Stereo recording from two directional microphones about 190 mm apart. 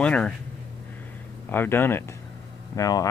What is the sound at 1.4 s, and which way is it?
Speech, 10° left (ahead or behind).